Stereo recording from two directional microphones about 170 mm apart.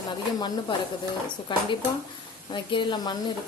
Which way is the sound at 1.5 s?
30° left (ahead or behind).